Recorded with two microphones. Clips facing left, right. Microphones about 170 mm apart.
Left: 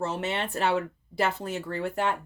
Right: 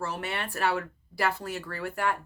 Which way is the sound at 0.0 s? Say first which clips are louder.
Left 4 dB; 25° left (ahead or behind).